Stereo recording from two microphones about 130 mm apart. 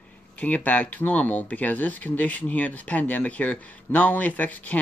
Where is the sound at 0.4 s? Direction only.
10° left (ahead or behind).